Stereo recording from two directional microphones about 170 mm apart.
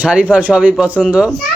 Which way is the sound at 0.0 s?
10° right (ahead or behind).